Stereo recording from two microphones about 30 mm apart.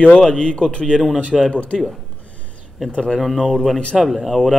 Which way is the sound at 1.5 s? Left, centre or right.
Left.